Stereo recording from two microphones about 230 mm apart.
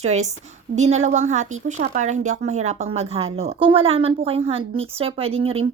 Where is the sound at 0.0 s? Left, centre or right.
Right.